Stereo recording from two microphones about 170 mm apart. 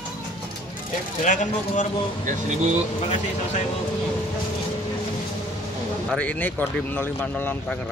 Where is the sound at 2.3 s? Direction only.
45° right (ahead or behind).